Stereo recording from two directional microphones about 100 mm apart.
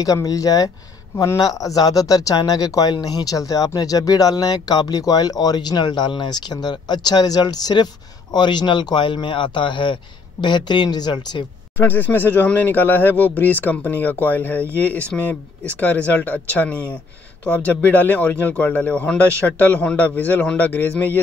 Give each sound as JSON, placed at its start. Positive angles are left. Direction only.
{"t": 0.0, "sound": "speech", "side_deg": 35}
{"t": 11.7, "sound": "speech", "side_deg": 20}